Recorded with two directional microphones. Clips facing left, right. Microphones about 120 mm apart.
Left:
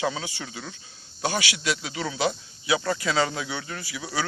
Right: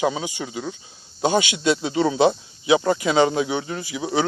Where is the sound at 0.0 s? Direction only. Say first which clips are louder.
Right 6 dB; 20° right (ahead or behind).